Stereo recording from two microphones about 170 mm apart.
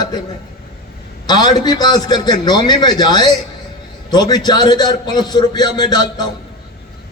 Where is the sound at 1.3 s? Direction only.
25° left (ahead or behind).